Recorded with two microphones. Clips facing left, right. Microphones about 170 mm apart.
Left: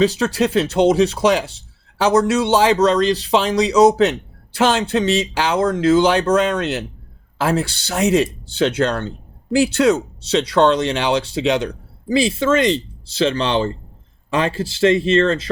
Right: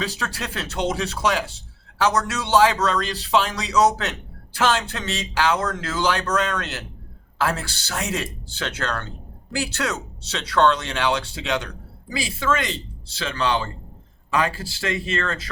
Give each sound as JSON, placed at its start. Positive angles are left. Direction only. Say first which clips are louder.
{"t": 0.0, "sound": "speech", "louder": "left 13 dB", "side_deg": 20}